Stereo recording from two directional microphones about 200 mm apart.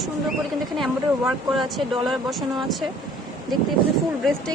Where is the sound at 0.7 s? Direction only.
Centre (ahead or behind).